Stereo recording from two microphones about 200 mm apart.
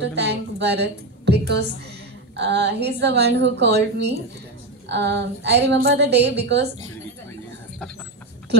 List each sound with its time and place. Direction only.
0.0 s a woman's voice: 55° right (ahead or behind)